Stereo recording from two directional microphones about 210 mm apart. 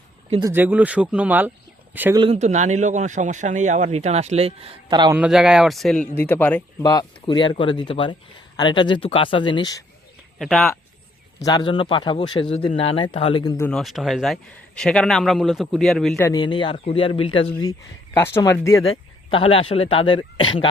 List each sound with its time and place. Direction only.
0.3 s speech: 25° right (ahead or behind)
0.5 s speech: 10° right (ahead or behind)
2.1 s speech: 25° right (ahead or behind)
5.1 s a man's voice: 5° right (ahead or behind)
6.8 s speech: 20° left (ahead or behind)
10.3 s speech: centre (ahead or behind)
11.3 s speech: 15° left (ahead or behind)
13.7 s a man's voice: centre (ahead or behind)
16.1 s speech: 15° left (ahead or behind)
19.3 s speech: 25° left (ahead or behind)